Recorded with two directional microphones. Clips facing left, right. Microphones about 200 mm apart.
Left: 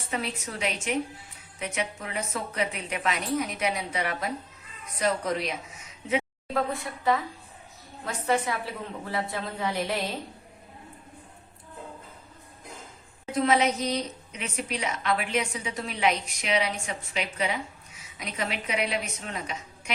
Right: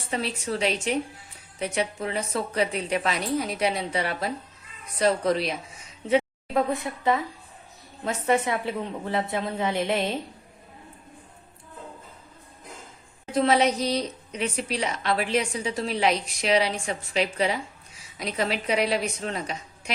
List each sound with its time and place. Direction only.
0.1 s a woman's voice: 30° right (ahead or behind)
6.5 s a woman's voice: 20° right (ahead or behind)
13.3 s a woman's voice: 35° right (ahead or behind)